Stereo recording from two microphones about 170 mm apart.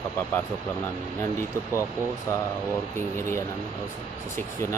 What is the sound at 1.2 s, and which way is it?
A man's voice, 15° left (ahead or behind).